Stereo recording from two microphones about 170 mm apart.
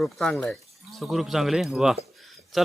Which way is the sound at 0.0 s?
5° left (ahead or behind).